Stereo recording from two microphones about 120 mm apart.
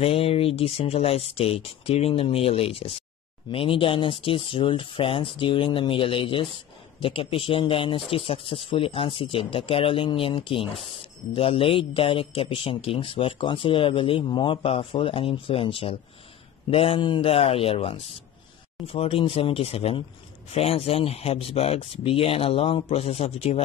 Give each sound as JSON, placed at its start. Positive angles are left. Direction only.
{"t": 0.0, "sound": "speech", "side_deg": 55}